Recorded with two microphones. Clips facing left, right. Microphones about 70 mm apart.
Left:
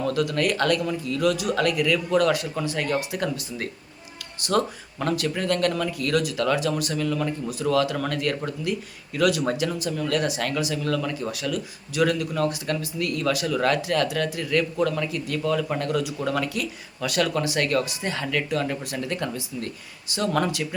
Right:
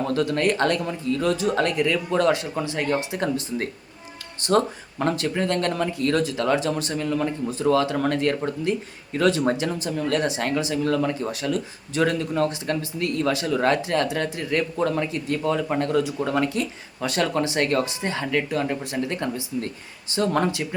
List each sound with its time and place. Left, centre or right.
0.0 s speech: right